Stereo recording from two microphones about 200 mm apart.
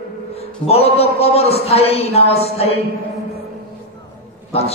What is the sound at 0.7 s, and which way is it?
A man's voice, 30° left (ahead or behind).